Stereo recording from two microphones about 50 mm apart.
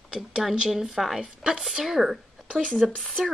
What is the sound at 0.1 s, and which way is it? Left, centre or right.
Speech, centre.